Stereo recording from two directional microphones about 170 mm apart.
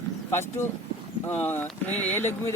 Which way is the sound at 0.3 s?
15° left (ahead or behind).